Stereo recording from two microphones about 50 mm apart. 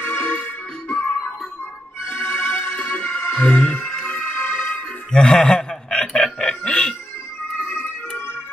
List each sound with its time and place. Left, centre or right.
0.0 s music: left
2.0 s music: left
4.3 s music: left
5.1 s a man's voice: left
5.6 s chuckle: centre